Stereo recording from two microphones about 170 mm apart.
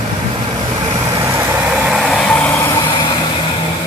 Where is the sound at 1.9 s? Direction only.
Centre (ahead or behind).